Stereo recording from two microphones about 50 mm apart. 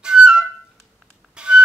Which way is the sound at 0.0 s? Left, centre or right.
Centre.